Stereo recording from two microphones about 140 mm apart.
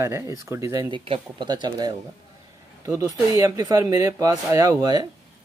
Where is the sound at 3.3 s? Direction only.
25° right (ahead or behind).